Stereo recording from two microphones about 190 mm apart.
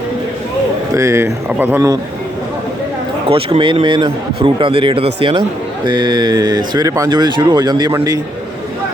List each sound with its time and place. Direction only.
0.9 s speech: 15° right (ahead or behind)
3.2 s speech: 30° right (ahead or behind)